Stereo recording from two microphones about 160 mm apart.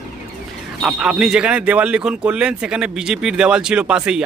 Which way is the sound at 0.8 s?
5° right (ahead or behind).